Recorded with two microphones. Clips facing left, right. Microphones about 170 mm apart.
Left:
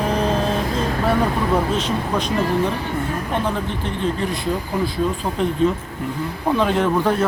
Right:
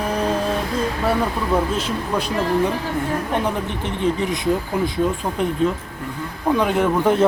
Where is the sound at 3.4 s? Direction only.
20° right (ahead or behind).